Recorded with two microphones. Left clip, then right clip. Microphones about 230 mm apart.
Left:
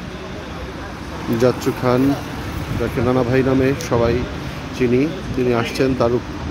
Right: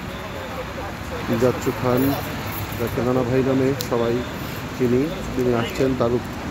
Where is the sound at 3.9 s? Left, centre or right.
Centre.